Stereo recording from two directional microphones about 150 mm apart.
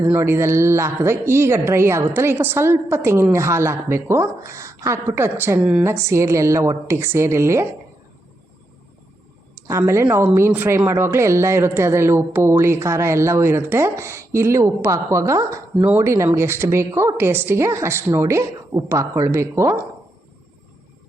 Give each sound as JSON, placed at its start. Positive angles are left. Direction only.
{"t": 0.1, "sound": "speech", "side_deg": -15}
{"t": 9.6, "sound": "speech", "side_deg": -20}